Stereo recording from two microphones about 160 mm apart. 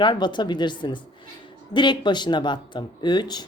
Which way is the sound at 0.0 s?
30° left (ahead or behind).